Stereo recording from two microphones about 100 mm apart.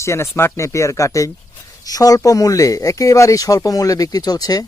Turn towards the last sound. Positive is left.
turn(degrees=40)  # may be behind; listen again after turning